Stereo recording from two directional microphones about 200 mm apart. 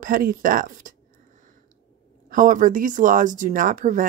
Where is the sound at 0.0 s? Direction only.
45° right (ahead or behind).